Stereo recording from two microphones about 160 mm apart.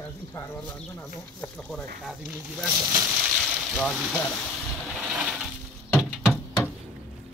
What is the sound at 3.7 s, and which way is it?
Speech, centre (ahead or behind).